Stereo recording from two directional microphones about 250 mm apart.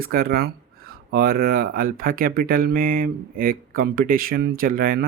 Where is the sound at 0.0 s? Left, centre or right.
Right.